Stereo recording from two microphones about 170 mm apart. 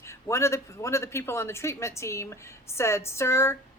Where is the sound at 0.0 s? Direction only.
15° left (ahead or behind).